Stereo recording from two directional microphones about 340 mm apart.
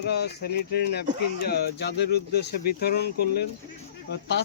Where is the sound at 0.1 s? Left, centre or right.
Left.